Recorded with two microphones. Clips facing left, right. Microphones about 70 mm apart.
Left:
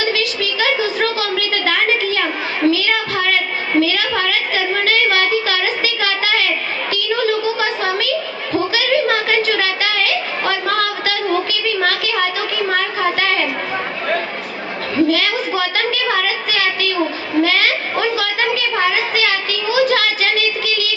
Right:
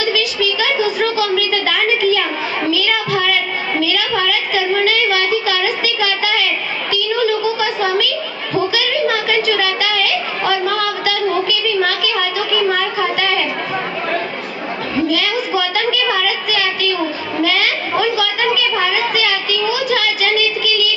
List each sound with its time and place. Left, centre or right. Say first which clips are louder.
0.0 s a sound: right 2 dB; left
2.6 s child singing: left 2 dB; left
3.8 s a sound: left 2 dB; left
8.7 s chatter: left 1 dB; left
12.7 s a woman's voice: even; left
15.1 s a woman's voice: right 1 dB; left